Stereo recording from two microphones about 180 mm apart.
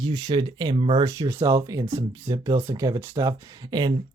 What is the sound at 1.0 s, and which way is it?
Speech, 20° right (ahead or behind).